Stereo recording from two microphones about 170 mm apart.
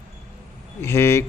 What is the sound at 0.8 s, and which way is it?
Speech, 15° left (ahead or behind).